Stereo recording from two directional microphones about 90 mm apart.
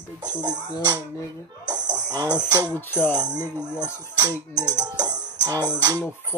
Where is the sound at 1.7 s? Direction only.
50° right (ahead or behind).